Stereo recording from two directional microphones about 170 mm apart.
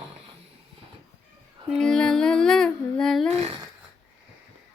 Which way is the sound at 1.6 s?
5° left (ahead or behind).